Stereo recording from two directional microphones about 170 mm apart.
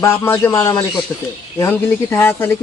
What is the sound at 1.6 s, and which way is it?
Speech, 15° left (ahead or behind).